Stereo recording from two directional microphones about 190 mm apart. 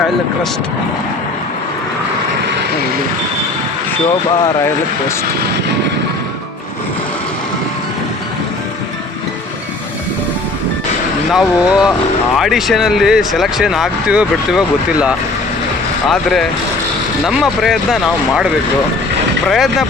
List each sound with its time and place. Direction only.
11.3 s speech: 5° right (ahead or behind)
16.0 s speech: centre (ahead or behind)
19.5 s speech: centre (ahead or behind)